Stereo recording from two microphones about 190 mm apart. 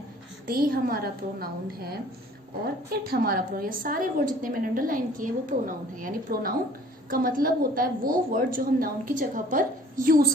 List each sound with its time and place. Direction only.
0.4 s a woman's voice: 50° right (ahead or behind)
2.9 s a woman's voice: 50° right (ahead or behind)